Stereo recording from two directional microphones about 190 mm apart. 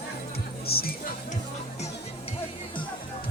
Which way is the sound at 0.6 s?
55° left (ahead or behind).